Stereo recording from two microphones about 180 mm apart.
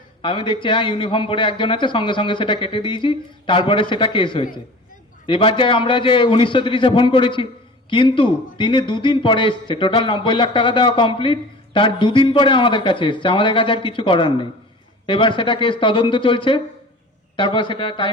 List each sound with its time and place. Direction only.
0.2 s a man's voice: 30° left (ahead or behind)